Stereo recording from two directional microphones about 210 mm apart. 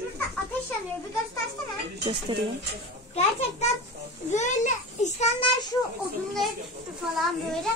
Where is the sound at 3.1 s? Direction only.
30° left (ahead or behind).